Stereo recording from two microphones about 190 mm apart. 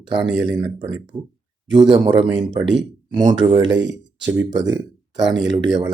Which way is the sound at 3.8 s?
70° right (ahead or behind).